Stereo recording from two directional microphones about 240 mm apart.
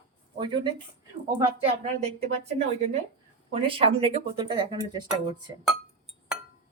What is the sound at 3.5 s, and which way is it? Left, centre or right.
Speech, right.